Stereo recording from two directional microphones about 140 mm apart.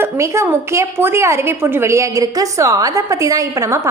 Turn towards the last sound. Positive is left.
turn(degrees=-20)  # may be behind; listen again after turning